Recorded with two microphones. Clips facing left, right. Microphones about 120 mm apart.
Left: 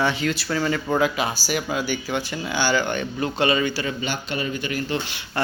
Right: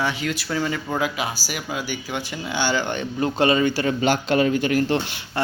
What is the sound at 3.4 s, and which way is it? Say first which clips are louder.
Speech: right 3 dB; 40° right (ahead or behind).